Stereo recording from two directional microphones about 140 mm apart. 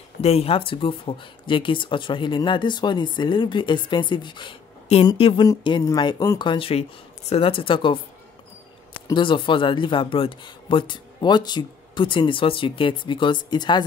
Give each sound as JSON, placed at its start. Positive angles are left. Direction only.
{"t": 0.2, "sound": "speech", "side_deg": 45}
{"t": 5.4, "sound": "speech", "side_deg": 30}
{"t": 9.1, "sound": "speech", "side_deg": 35}